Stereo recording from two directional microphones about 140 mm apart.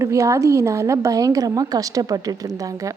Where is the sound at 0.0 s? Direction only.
20° right (ahead or behind).